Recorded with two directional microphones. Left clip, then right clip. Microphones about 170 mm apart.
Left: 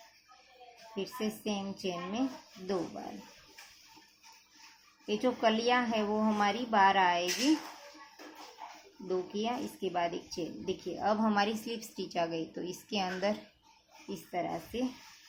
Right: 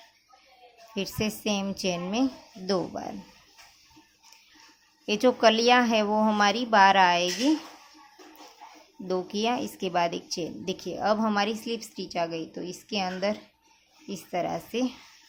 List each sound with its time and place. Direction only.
0.9 s a woman's voice: 40° right (ahead or behind)
5.0 s a woman's voice: 40° right (ahead or behind)
9.0 s speech: 40° right (ahead or behind); by 13.3 s 25° right (ahead or behind)
14.1 s a woman's voice: 35° right (ahead or behind)